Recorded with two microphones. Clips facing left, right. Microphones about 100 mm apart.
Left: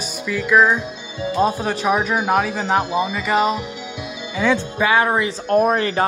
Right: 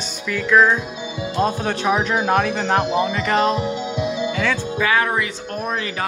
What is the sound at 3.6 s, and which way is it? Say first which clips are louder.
Music: right 7 dB; 25° right (ahead or behind).